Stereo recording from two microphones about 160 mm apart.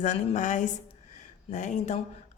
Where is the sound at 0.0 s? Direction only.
50° left (ahead or behind).